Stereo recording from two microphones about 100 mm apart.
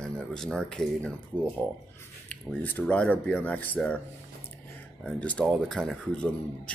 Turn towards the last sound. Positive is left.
turn(degrees=10)  # may be behind; listen again after turning